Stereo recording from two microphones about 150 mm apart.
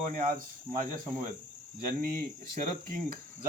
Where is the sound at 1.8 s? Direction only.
70° right (ahead or behind).